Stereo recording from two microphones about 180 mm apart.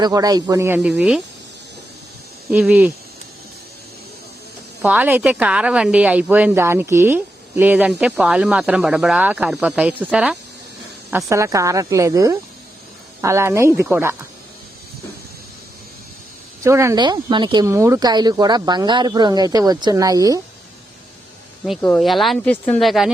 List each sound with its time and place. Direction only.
0.0 s a woman's voice: 20° right (ahead or behind); by 1.2 s 5° right (ahead or behind)
2.5 s a woman's voice: 10° right (ahead or behind)
4.8 s a woman's voice: 10° right (ahead or behind)
11.3 s a woman's voice: 15° right (ahead or behind)
16.6 s speech: 15° right (ahead or behind)
21.8 s speech: 10° left (ahead or behind)